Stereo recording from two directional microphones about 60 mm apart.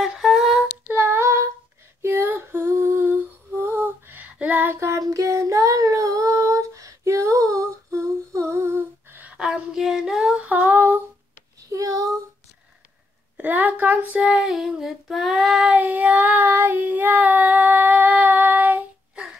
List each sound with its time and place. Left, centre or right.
0.0 s humming: centre
0.9 s female singing: right
2.8 s humming: right
4.2 s female singing: right
4.7 s child singing: right
5.0 s female singing: right
9.8 s humming: centre
10.4 s female singing: right
11.7 s a sound: right
13.4 s a sound: right
14.1 s child singing: centre
14.5 s female singing: centre
15.7 s child singing: right